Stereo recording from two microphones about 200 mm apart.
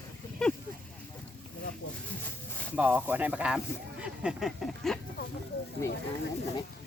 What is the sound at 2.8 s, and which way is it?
Speech, 10° right (ahead or behind).